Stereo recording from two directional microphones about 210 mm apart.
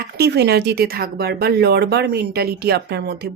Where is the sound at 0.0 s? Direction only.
50° right (ahead or behind).